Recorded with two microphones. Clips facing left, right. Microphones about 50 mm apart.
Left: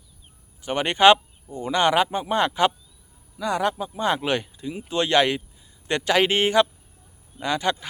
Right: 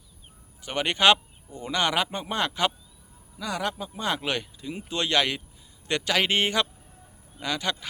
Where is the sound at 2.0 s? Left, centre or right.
Centre.